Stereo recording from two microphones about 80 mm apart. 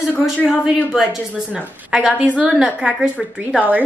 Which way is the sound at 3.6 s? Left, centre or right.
Right.